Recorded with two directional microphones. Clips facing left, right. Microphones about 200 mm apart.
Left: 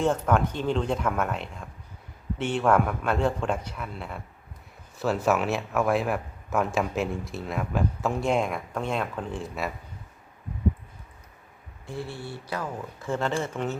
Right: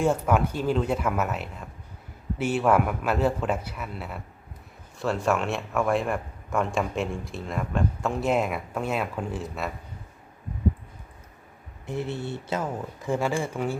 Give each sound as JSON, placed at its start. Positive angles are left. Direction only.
{"t": 0.0, "sound": "a man's voice", "side_deg": -10}
{"t": 11.9, "sound": "speech", "side_deg": -20}